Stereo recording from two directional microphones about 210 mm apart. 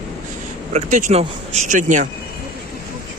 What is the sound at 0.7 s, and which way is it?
Speech, 35° right (ahead or behind).